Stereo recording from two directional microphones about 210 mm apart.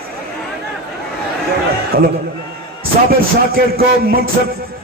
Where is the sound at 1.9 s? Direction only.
45° right (ahead or behind).